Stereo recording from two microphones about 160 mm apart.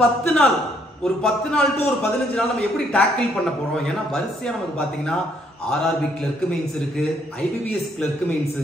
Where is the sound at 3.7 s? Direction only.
Centre (ahead or behind).